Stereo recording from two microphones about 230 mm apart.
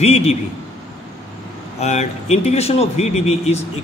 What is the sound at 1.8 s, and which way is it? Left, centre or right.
A man's voice, left.